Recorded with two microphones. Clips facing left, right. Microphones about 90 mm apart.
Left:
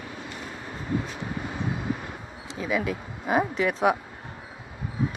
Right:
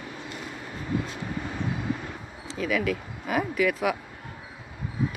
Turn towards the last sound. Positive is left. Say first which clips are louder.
# left 2 dB
turn(degrees=30)  # may be behind; listen again after turning